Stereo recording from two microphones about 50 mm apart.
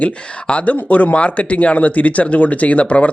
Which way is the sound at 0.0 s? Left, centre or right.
Left.